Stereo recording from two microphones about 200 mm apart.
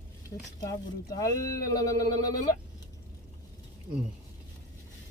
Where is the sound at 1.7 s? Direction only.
15° left (ahead or behind).